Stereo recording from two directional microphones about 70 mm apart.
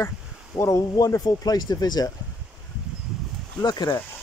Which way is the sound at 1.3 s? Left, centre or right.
Left.